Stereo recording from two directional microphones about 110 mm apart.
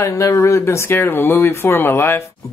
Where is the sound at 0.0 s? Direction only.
30° left (ahead or behind).